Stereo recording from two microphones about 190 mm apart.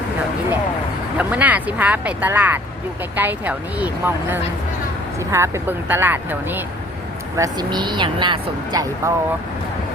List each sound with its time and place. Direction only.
1.2 s speech: 10° right (ahead or behind)